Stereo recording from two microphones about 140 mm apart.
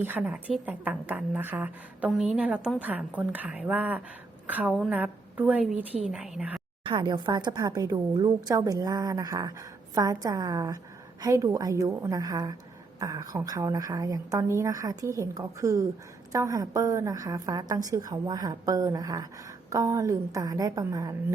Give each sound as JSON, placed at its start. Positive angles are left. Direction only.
{"t": 0.2, "sound": "a woman's voice", "side_deg": -10}
{"t": 6.8, "sound": "a woman's voice", "side_deg": -35}